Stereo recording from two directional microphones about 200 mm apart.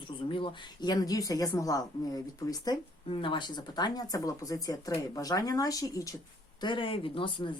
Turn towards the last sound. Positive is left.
turn(degrees=25)  # may be behind; listen again after turning